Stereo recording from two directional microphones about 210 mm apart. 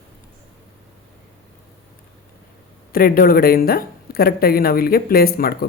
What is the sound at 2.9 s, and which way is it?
Speech, 45° left (ahead or behind).